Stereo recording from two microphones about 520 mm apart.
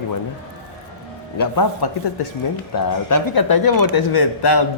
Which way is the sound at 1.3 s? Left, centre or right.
Left.